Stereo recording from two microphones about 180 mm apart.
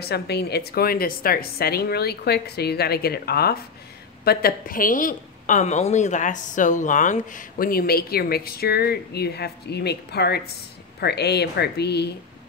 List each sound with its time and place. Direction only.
0.0 s a woman's voice: 65° left (ahead or behind)